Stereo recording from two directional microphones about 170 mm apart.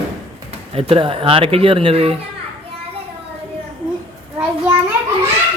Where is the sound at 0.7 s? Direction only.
35° right (ahead or behind).